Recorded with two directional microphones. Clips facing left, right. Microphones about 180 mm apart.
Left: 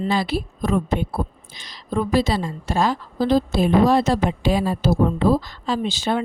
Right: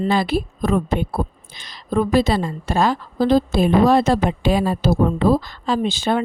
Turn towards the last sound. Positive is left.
turn(degrees=-55)  # may be behind; listen again after turning